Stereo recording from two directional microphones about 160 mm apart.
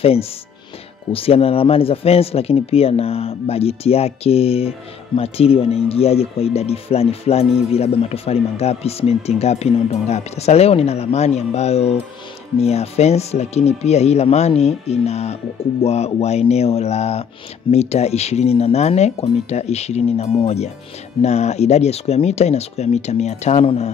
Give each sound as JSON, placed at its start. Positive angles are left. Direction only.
{"t": 0.0, "sound": "speech", "side_deg": 40}